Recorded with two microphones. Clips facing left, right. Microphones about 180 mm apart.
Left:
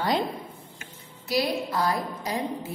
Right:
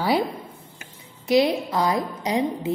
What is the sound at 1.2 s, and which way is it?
A woman's voice, 20° right (ahead or behind).